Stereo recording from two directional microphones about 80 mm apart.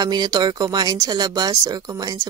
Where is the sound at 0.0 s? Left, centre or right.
Right.